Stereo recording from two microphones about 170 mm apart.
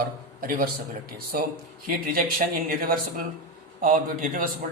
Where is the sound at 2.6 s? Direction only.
55° right (ahead or behind).